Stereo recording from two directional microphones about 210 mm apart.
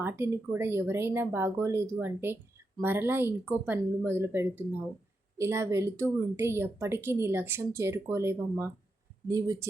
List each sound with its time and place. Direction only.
0.0 s speech: 10° right (ahead or behind)